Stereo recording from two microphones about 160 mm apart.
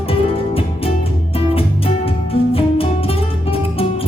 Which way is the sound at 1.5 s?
35° left (ahead or behind).